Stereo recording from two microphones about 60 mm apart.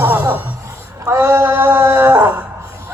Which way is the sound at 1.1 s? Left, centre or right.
Right.